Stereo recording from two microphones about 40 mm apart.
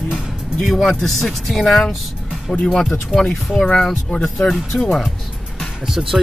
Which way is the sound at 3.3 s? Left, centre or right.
Centre.